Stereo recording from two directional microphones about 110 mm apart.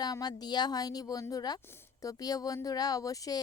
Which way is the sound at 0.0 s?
35° left (ahead or behind).